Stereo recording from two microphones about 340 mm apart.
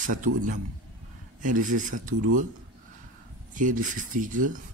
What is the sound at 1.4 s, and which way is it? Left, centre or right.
A man's voice, right.